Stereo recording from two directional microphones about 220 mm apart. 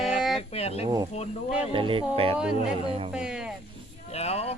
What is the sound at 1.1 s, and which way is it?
Speech, 30° left (ahead or behind).